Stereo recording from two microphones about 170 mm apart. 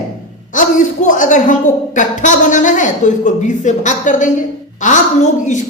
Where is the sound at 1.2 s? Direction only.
50° left (ahead or behind).